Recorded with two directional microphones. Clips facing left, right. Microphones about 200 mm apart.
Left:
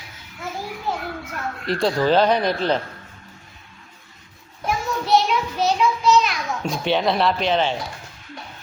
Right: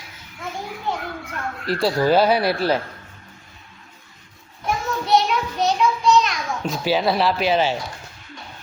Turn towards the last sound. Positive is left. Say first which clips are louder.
# right 1 dB
turn(degrees=-5)  # may be behind; listen again after turning